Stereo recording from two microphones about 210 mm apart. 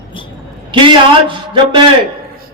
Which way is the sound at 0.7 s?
25° right (ahead or behind).